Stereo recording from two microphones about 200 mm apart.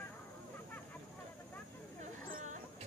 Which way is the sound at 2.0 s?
40° right (ahead or behind).